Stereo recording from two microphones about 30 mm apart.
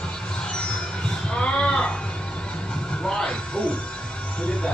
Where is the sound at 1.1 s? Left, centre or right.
Left.